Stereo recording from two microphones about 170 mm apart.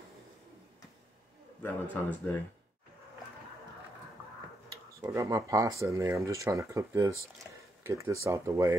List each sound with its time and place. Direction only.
1.6 s speech: 10° left (ahead or behind)
5.0 s speech: 15° right (ahead or behind)